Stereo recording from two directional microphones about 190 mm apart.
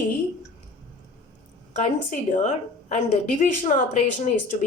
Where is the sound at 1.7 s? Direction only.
40° left (ahead or behind).